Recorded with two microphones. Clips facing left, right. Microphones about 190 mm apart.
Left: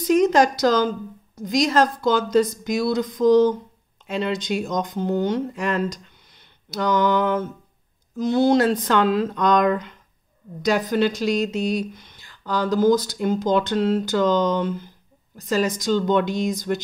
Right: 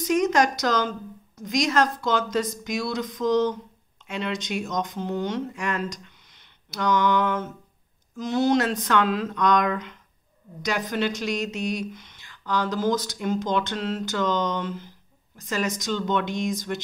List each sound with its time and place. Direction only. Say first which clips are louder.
0.0 s a woman's voice: left 4 dB; 30° left (ahead or behind)